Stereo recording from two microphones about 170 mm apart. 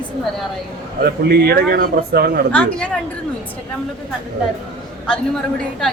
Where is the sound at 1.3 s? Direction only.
65° right (ahead or behind).